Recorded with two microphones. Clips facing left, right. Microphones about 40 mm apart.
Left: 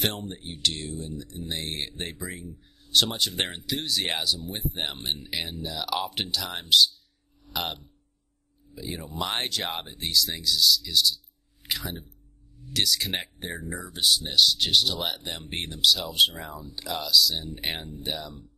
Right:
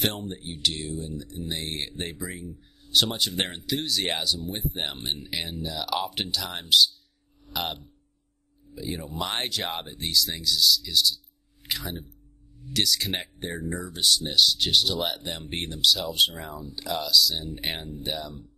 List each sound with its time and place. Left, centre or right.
0.0 s speech: centre